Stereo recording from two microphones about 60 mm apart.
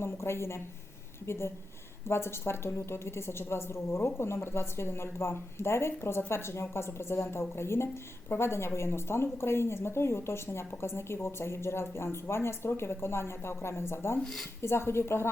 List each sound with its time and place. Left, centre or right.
0.0 s a woman's voice: left
2.0 s a woman's voice: left
14.2 s speech: centre
14.6 s a woman's voice: left